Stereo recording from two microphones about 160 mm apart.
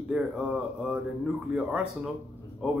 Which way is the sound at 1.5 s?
5° right (ahead or behind).